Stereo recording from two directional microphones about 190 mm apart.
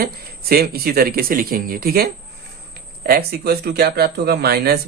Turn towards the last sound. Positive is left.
turn(degrees=-55)  # may be behind; listen again after turning